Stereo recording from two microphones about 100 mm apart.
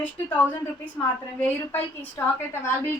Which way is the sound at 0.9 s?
15° left (ahead or behind).